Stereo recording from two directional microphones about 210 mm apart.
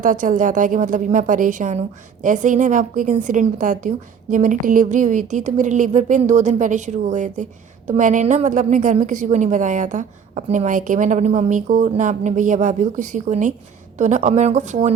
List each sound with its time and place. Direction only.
0.0 s a woman's voice: 35° right (ahead or behind)